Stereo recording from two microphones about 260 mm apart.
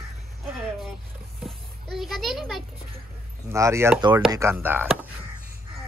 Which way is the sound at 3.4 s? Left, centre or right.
Centre.